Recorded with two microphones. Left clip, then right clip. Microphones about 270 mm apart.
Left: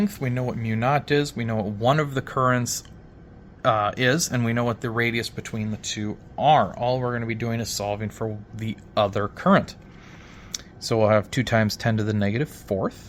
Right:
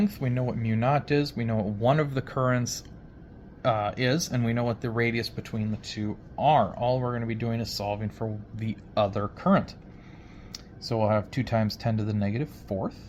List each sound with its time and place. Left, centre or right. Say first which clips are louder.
0.0 s speech: left 2 dB; centre; by 12.9 s left